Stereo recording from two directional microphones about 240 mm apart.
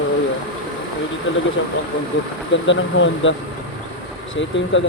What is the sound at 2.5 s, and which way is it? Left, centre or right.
Speech, left.